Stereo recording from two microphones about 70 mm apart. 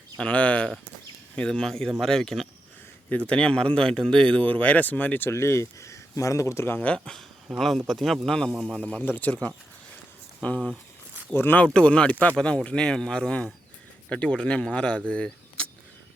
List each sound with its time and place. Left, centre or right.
0.2 s speech: centre
3.1 s speech: centre; by 6.7 s left
6.7 s speech: centre
7.6 s speech: centre
9.0 s speech: left
11.6 s speech: centre